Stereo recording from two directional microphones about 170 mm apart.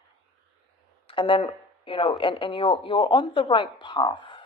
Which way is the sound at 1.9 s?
30° left (ahead or behind).